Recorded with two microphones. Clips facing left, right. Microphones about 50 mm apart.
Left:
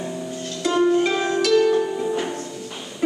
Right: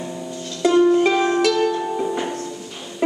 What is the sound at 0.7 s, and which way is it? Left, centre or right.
Music, centre.